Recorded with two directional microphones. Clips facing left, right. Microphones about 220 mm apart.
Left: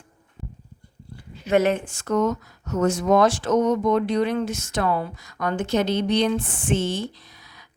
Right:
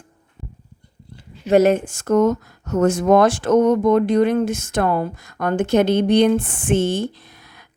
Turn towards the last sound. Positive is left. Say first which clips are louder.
# right 4 dB
turn(degrees=-55)  # may be behind; listen again after turning